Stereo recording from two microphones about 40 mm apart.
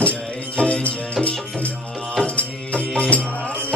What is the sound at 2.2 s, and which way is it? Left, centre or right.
Music, left.